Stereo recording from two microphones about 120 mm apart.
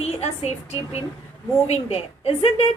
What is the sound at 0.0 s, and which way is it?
A woman's voice, 60° left (ahead or behind).